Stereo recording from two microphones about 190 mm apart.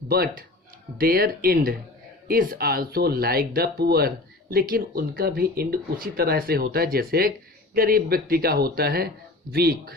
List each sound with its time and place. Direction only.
0.1 s speech: 55° right (ahead or behind)